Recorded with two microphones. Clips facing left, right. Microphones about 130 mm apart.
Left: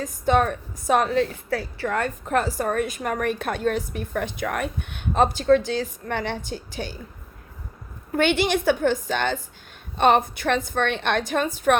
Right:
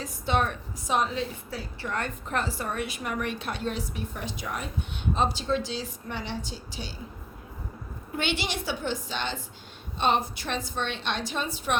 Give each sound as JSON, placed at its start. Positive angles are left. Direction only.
{"t": 0.0, "sound": "a woman's voice", "side_deg": 45}
{"t": 1.9, "sound": "a woman's voice", "side_deg": 45}
{"t": 8.1, "sound": "a woman's voice", "side_deg": 50}